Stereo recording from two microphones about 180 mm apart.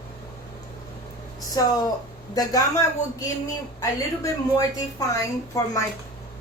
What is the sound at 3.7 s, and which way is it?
A woman's voice, 20° left (ahead or behind).